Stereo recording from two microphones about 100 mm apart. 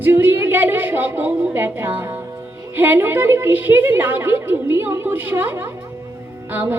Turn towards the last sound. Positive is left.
turn(degrees=-20)  # may be behind; listen again after turning